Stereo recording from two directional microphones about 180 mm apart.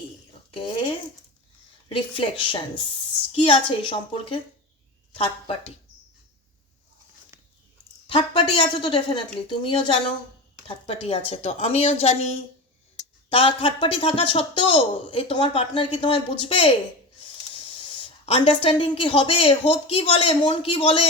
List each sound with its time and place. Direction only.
1.9 s a woman's voice: 30° left (ahead or behind)
8.0 s a woman's voice: 30° left (ahead or behind)
13.3 s speech: 30° left (ahead or behind)
18.3 s a woman's voice: 30° left (ahead or behind)